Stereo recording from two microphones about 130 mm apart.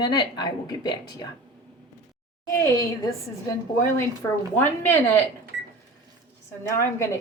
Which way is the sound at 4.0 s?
15° left (ahead or behind).